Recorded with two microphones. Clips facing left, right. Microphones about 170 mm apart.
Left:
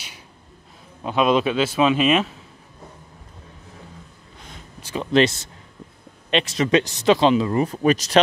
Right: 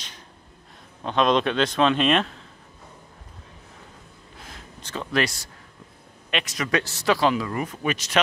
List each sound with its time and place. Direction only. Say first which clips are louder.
1.0 s a man's voice: left 2 dB; 5° left (ahead or behind)
4.4 s a sound: left 1 dB; centre (ahead or behind)
5.1 s speech: left 8 dB; 25° left (ahead or behind)